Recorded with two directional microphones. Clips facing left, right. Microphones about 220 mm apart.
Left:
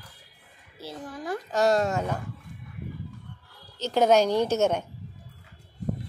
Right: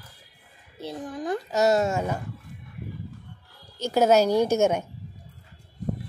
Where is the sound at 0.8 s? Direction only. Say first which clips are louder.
Right 4 dB; 20° right (ahead or behind).